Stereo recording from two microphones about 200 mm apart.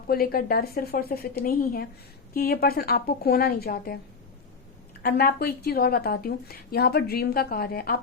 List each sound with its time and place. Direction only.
0.1 s a woman's voice: 50° left (ahead or behind)
5.0 s a woman's voice: 50° left (ahead or behind)